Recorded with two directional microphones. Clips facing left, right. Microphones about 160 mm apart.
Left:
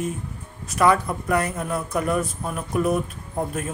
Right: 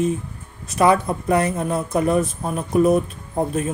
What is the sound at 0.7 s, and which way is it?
Speech, 25° right (ahead or behind).